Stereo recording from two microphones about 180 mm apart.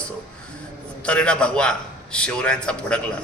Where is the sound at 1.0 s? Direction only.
5° left (ahead or behind).